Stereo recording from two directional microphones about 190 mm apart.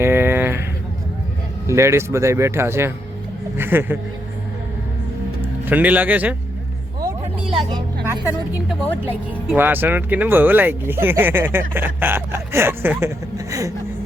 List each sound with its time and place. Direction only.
0.0 s a sound: 10° right (ahead or behind)
1.6 s speech: 15° right (ahead or behind)
5.4 s a man's voice: 10° right (ahead or behind)
7.7 s a woman's voice: 25° right (ahead or behind)
8.2 s speech: 5° right (ahead or behind)